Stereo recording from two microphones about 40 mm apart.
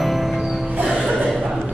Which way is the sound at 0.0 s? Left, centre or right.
Centre.